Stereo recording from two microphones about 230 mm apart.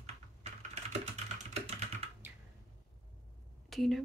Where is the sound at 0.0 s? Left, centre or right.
Right.